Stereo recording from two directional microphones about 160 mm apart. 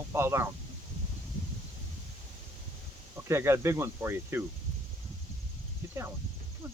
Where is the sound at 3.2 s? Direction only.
15° right (ahead or behind).